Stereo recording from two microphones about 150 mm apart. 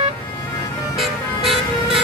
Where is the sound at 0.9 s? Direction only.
Centre (ahead or behind).